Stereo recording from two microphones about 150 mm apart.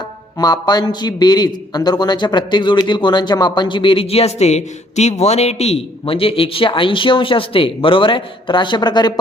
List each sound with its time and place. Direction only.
0.3 s a man's voice: 25° left (ahead or behind)